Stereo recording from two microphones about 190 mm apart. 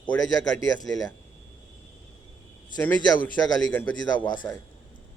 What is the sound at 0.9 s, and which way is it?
Speech, 20° left (ahead or behind).